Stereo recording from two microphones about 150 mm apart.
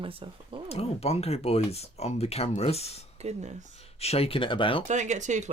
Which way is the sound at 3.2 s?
45° right (ahead or behind).